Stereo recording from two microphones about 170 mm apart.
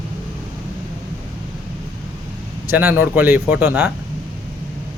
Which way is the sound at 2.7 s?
10° right (ahead or behind).